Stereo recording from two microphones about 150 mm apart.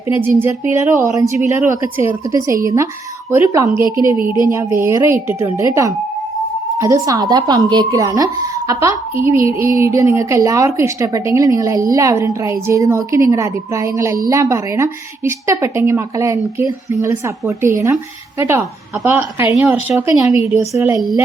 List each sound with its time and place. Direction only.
0.2 s a woman's voice: 15° right (ahead or behind)